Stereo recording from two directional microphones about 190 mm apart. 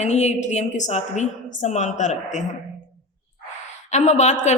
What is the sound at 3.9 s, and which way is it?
Speech, 35° left (ahead or behind).